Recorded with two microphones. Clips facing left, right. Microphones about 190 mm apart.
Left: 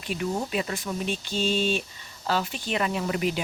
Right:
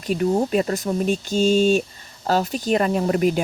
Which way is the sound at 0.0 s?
40° right (ahead or behind).